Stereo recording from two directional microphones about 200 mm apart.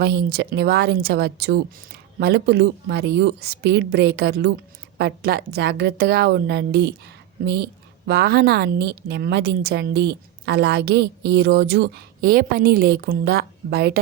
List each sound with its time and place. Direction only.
0.0 s speech: 55° right (ahead or behind)